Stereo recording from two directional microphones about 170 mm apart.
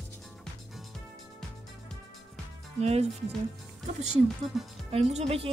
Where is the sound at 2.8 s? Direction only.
40° right (ahead or behind).